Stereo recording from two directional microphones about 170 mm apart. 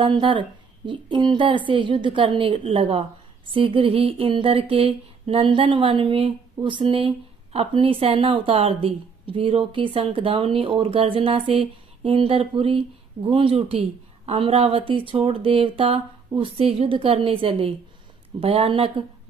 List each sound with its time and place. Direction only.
0.0 s speech: 30° right (ahead or behind)